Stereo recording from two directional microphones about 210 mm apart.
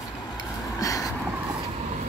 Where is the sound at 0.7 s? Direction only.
15° left (ahead or behind).